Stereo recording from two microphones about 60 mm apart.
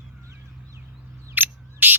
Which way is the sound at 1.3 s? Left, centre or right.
Right.